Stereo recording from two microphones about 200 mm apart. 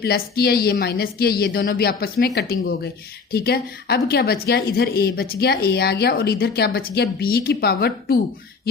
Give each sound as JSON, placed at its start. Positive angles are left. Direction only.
{"t": 0.0, "sound": "a woman's voice", "side_deg": 50}